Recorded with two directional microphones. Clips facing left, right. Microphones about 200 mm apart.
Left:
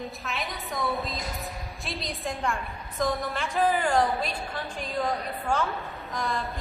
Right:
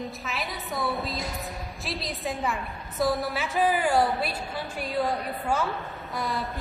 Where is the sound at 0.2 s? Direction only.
Centre (ahead or behind).